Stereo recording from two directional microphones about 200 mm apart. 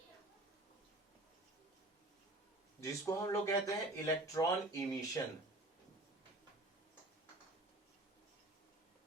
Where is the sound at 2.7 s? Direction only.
15° left (ahead or behind).